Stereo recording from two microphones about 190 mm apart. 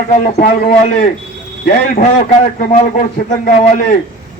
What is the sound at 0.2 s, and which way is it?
A man's voice, 50° left (ahead or behind).